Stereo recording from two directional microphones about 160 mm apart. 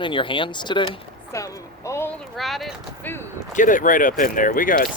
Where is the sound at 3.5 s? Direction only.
55° left (ahead or behind).